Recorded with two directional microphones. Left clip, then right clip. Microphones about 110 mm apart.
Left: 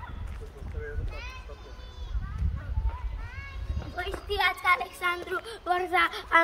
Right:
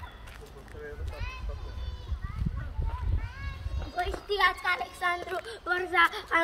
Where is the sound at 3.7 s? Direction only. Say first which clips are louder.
Right 2 dB; 5° right (ahead or behind).